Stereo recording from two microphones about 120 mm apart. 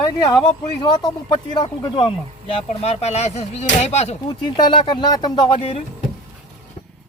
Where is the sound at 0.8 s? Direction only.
35° left (ahead or behind).